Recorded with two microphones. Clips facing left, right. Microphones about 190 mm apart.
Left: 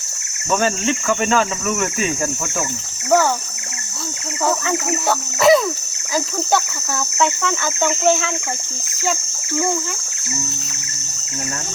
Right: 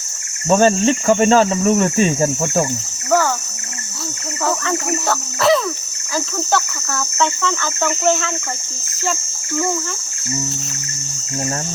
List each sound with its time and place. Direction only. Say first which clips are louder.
0.4 s cricket: right 6 dB; 30° right (ahead or behind)
4.4 s speech: even; 10° left (ahead or behind)
7.2 s speech: even; 10° left (ahead or behind)